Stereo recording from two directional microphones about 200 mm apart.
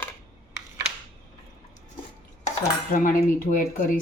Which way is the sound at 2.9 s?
40° left (ahead or behind).